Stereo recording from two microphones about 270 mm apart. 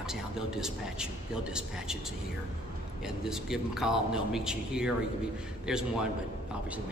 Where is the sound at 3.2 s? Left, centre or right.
Centre.